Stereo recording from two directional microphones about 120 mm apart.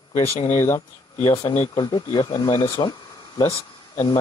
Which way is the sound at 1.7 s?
40° left (ahead or behind).